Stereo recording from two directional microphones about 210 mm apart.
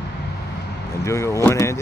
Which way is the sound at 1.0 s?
15° left (ahead or behind).